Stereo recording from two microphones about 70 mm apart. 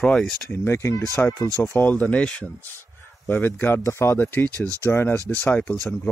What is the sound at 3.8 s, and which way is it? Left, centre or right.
Speech, left.